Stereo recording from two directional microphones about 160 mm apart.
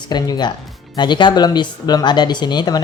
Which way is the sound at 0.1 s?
25° left (ahead or behind).